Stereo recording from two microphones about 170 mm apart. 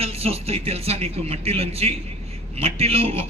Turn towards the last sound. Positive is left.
turn(degrees=-35)  # may be behind; listen again after turning